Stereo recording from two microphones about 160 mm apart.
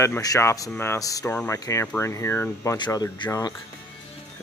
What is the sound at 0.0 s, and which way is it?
Speech, 20° left (ahead or behind).